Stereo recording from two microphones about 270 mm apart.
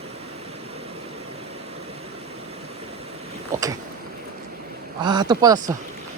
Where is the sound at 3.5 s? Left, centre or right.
Centre.